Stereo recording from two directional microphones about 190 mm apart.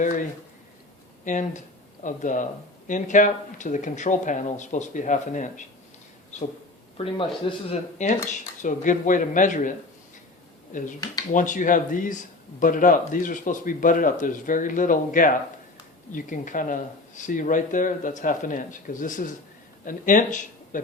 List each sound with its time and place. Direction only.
1.2 s speech: 40° left (ahead or behind)
6.9 s speech: 30° left (ahead or behind)
11.3 s a man's voice: 45° left (ahead or behind)